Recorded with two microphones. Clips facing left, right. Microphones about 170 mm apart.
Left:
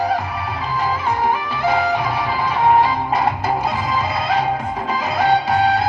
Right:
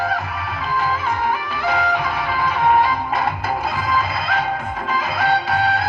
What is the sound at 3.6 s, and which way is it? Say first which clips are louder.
Music: left 1 dB; 20° left (ahead or behind).